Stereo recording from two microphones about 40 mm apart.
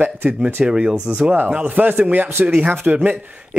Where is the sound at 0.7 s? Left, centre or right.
Right.